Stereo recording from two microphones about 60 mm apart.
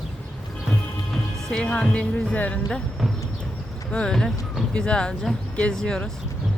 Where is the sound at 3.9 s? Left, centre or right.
Centre.